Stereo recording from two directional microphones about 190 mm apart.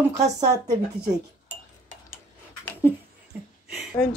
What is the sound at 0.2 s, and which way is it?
Speech, 20° right (ahead or behind).